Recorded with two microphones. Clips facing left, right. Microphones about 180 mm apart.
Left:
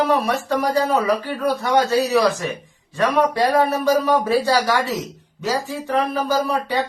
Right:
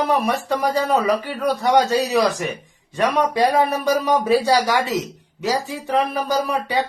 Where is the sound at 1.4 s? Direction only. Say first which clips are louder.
Right 2 dB; 20° right (ahead or behind).